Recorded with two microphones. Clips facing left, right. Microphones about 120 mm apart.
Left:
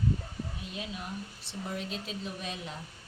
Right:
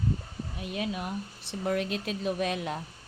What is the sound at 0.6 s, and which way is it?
Speech, 60° right (ahead or behind).